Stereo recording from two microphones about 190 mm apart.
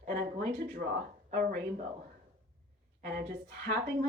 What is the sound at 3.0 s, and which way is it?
Speech, 55° right (ahead or behind).